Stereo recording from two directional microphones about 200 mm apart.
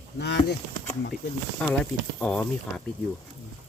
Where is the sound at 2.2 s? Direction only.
5° left (ahead or behind).